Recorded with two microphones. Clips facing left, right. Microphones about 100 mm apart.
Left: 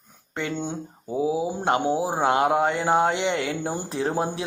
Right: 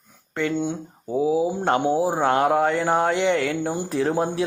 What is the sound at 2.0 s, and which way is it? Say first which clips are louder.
Speech: right 2 dB; 20° left (ahead or behind).